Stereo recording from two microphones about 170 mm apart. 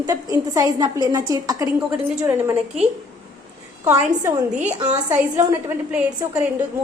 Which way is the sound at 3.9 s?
10° right (ahead or behind).